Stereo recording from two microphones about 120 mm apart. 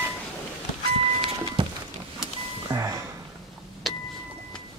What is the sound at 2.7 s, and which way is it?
Music, 25° right (ahead or behind).